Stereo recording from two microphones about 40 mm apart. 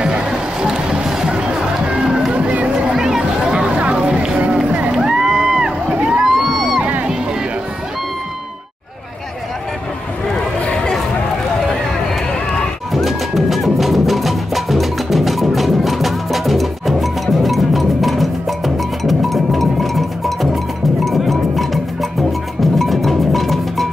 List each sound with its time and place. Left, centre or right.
0.0 s music: right
2.7 s a sound: centre
3.5 s a sound: right
4.9 s music: centre
5.9 s vehicle: right
6.2 s music: centre
12.9 s music: centre